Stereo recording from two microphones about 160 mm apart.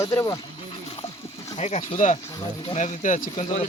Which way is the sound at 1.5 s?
45° left (ahead or behind).